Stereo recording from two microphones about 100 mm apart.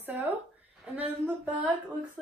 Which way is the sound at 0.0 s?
20° right (ahead or behind).